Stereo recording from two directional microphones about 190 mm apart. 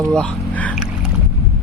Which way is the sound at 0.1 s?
5° left (ahead or behind).